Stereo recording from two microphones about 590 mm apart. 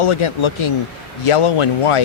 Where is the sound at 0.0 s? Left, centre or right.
Left.